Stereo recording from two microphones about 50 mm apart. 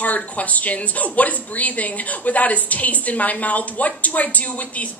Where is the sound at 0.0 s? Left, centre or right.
Left.